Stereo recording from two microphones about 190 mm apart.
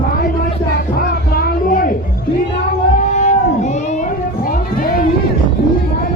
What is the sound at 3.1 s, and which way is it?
Cat, 40° left (ahead or behind).